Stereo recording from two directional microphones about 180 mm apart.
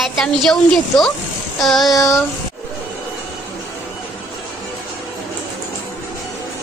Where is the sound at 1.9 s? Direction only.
15° left (ahead or behind).